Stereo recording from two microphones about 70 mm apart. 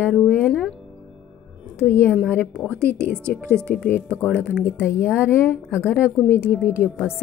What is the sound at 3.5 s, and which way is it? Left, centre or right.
Speech, centre.